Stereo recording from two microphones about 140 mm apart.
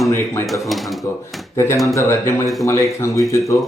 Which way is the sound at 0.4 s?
Centre (ahead or behind).